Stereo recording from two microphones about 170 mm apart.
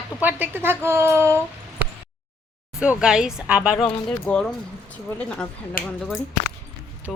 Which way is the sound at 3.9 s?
5° left (ahead or behind).